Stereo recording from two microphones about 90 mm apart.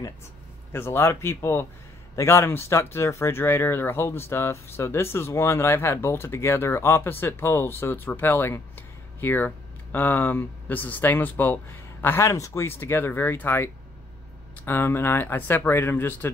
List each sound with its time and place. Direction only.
0.7 s speech: 30° left (ahead or behind)